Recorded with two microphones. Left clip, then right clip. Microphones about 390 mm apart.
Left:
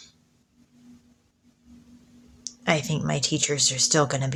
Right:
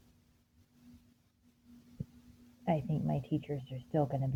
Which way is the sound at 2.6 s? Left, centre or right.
Right.